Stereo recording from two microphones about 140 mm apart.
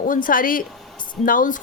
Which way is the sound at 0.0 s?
75° left (ahead or behind).